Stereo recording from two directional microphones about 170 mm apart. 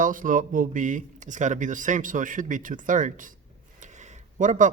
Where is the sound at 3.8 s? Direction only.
45° right (ahead or behind).